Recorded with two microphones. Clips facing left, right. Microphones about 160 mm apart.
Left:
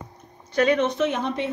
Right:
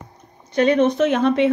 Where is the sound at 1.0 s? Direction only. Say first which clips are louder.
Right 9 dB; 75° right (ahead or behind).